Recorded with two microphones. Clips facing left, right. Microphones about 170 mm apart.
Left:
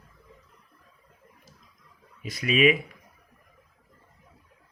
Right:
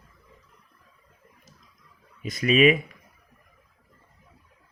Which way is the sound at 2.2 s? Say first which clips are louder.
Right 3 dB; 40° right (ahead or behind).